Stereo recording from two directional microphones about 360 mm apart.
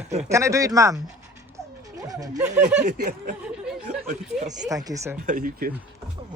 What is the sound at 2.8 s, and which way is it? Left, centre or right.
Speech, centre.